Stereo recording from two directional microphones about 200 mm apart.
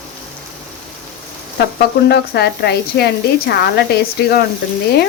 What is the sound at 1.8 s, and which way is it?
Speech, 55° left (ahead or behind).